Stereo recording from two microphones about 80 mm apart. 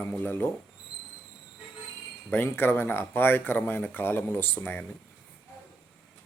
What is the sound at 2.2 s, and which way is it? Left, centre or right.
Speech, left.